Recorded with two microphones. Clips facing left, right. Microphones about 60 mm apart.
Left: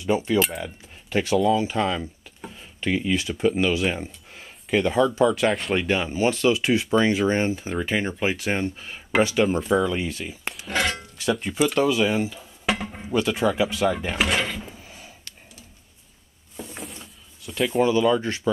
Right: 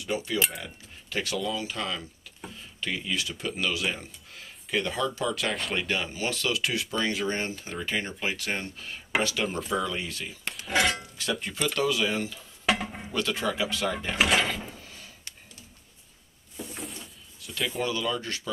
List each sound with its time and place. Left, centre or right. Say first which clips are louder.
0.0 s speech: left 7 dB; left
5.5 s speech: left 6 dB; centre
5.9 s speech: left 8 dB; left
9.4 s speech: left 9 dB; centre
9.7 s speech: left 7 dB; centre
10.5 s dishes: even; centre
11.1 s speech: left 8 dB; centre
12.6 s a sound: left 1 dB; centre
13.1 s speech: left 7 dB; centre
13.9 s speech: left 1 dB; centre
14.8 s a sound: left 3 dB; centre
16.5 s a sound: left 2 dB; centre
17.8 s speech: left 10 dB; left